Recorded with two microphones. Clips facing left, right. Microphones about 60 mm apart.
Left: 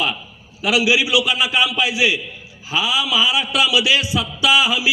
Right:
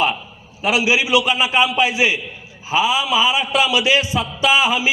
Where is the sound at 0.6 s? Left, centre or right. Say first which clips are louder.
Even; right.